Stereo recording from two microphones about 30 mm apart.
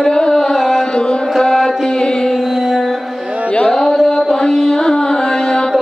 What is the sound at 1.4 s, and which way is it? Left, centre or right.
Music, left.